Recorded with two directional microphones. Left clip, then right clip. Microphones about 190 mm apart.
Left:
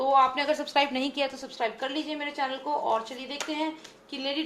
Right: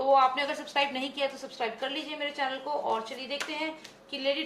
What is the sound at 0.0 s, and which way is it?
A woman's voice, 30° left (ahead or behind).